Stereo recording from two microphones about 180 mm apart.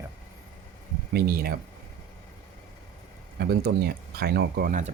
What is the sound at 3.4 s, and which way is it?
Speech, 60° right (ahead or behind).